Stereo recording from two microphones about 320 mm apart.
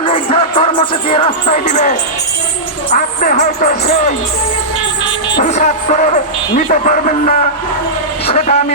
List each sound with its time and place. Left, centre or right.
0.0 s music: centre
2.9 s speech: left
5.4 s speech: left